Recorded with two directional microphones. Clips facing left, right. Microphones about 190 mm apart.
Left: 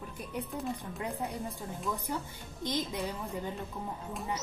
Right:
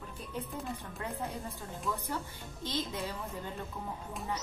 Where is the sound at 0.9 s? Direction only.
15° left (ahead or behind).